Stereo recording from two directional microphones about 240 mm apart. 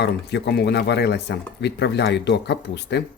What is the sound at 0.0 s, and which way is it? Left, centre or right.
A man's voice, left.